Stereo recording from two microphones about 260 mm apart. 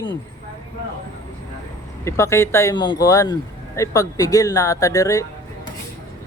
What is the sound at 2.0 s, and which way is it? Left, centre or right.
Speech, centre.